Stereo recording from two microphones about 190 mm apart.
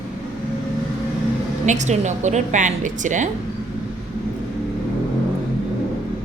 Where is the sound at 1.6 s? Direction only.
40° right (ahead or behind).